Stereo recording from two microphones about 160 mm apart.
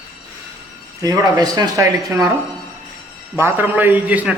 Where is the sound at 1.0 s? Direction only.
25° right (ahead or behind).